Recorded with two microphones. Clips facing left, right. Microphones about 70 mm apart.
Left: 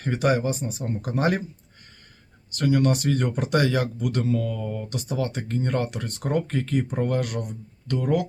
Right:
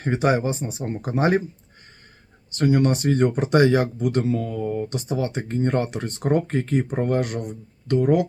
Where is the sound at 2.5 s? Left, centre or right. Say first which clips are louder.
Right 2 dB; right.